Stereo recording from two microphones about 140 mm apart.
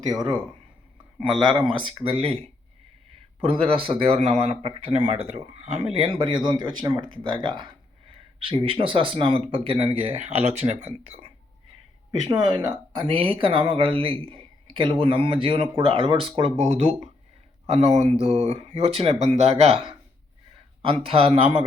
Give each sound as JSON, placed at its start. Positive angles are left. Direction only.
{"t": 1.5, "sound": "speech", "side_deg": -35}
{"t": 3.4, "sound": "speech", "side_deg": -45}
{"t": 12.3, "sound": "speech", "side_deg": -30}